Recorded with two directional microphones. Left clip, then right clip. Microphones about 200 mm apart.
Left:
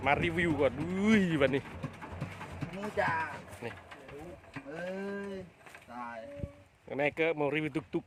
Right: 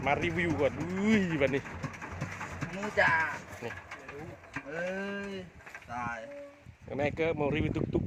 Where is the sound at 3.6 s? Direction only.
5° right (ahead or behind).